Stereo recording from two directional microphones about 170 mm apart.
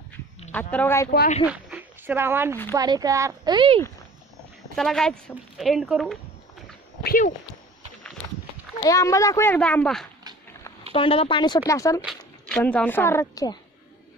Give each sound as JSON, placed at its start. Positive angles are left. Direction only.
{"t": 0.5, "sound": "speech", "side_deg": 10}
{"t": 1.4, "sound": "a woman's voice", "side_deg": -10}
{"t": 4.7, "sound": "speech", "side_deg": 0}
{"t": 7.0, "sound": "speech", "side_deg": 60}
{"t": 8.8, "sound": "speech", "side_deg": 20}
{"t": 10.9, "sound": "speech", "side_deg": 35}
{"t": 12.4, "sound": "speech", "side_deg": 5}